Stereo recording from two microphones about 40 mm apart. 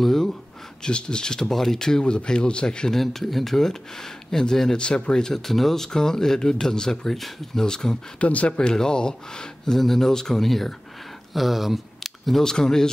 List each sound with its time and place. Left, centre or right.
0.0 s a sound: centre
0.8 s a man's voice: left
1.5 s a man's voice: centre
3.0 s speech: centre
4.7 s speech: left
5.4 s speech: centre
8.2 s speech: left
8.5 s speech: centre
12.4 s speech: centre